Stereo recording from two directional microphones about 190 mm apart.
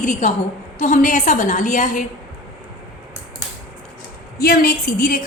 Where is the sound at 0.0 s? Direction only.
40° left (ahead or behind).